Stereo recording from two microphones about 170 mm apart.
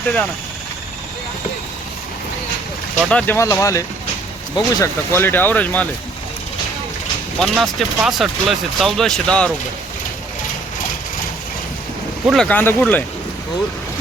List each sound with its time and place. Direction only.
3.0 s speech: 5° left (ahead or behind)
7.3 s speech: centre (ahead or behind)
12.2 s speech: centre (ahead or behind)